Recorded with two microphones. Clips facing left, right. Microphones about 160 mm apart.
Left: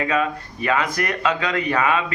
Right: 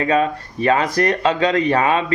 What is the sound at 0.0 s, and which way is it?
Speech, 35° right (ahead or behind).